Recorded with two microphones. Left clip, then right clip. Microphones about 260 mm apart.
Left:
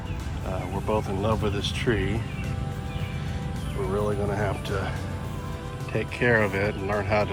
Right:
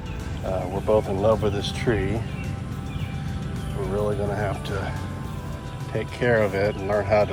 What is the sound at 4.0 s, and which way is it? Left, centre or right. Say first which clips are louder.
Speech: right 2 dB; centre.